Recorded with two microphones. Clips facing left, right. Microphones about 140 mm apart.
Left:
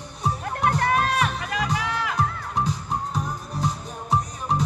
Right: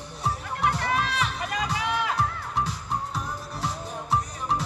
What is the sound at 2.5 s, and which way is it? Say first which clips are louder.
Music: left 3 dB; 15° left (ahead or behind).